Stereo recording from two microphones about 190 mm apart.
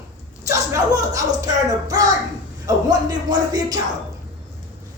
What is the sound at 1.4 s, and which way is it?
Music, 20° right (ahead or behind).